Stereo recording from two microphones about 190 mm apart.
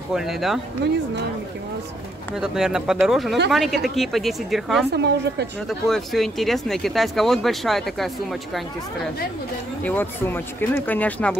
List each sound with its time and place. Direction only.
0.1 s speech: centre (ahead or behind)
2.3 s speech: centre (ahead or behind)
4.9 s speech: 60° right (ahead or behind)
5.7 s speech: centre (ahead or behind)
9.8 s speech: 10° left (ahead or behind)